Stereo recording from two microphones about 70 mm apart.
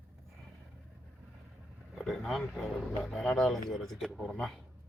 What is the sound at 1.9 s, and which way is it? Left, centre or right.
Speech, centre.